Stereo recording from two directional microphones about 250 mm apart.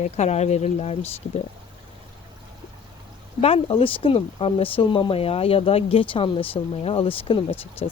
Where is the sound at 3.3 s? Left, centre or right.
Left.